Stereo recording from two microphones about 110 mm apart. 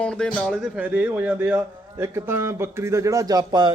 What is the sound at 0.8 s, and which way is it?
A man's voice, 15° right (ahead or behind).